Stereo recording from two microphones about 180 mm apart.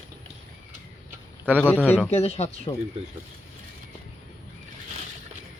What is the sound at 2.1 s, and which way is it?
Speech, 35° left (ahead or behind).